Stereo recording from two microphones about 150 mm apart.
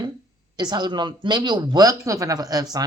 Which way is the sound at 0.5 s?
30° right (ahead or behind).